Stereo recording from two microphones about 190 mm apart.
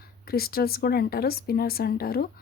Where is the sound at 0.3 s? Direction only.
55° left (ahead or behind).